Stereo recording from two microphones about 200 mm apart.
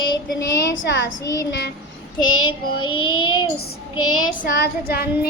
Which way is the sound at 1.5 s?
60° left (ahead or behind).